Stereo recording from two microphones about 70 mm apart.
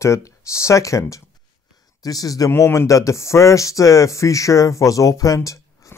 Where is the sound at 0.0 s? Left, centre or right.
Left.